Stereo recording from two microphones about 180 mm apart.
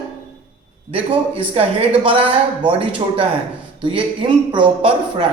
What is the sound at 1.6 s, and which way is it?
A man's voice, 35° right (ahead or behind).